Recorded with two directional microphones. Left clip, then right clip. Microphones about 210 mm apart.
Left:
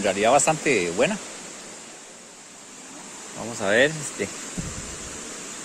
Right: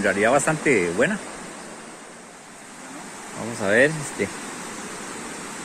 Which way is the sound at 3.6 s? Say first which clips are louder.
Right 1 dB; 10° left (ahead or behind).